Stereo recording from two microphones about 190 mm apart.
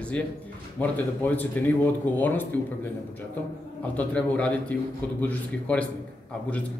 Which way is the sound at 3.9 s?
5° left (ahead or behind).